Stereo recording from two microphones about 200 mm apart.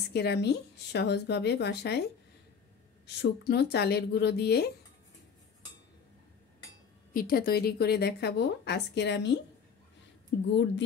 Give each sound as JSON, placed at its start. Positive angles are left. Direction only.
{"t": 0.1, "sound": "speech", "side_deg": 55}
{"t": 3.2, "sound": "speech", "side_deg": 55}
{"t": 7.2, "sound": "speech", "side_deg": 45}